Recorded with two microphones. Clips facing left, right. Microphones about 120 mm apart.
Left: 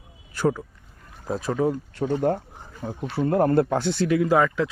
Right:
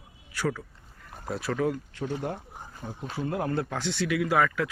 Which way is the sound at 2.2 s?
45° left (ahead or behind).